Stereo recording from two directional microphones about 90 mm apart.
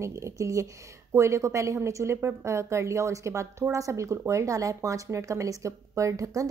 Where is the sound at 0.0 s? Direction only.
35° right (ahead or behind).